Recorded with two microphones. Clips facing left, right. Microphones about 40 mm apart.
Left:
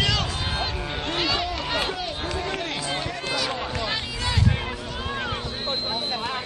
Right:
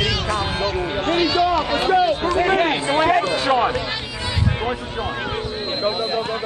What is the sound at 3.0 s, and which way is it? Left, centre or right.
Run, right.